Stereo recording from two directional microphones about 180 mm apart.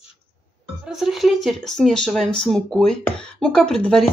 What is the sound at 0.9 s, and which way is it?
Speech, centre (ahead or behind).